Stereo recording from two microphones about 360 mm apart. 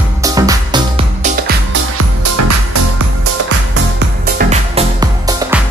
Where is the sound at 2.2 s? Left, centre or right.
Right.